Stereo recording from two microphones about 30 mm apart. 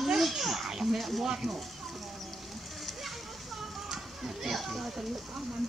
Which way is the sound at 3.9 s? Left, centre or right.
Centre.